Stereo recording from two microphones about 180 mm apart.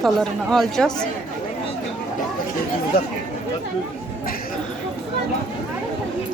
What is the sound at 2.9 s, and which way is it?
Speech, 60° left (ahead or behind).